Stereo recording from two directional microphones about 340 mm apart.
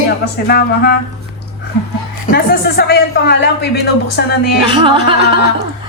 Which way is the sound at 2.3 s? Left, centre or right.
Left.